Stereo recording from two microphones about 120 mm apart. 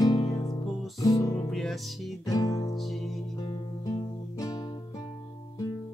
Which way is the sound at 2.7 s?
Centre (ahead or behind).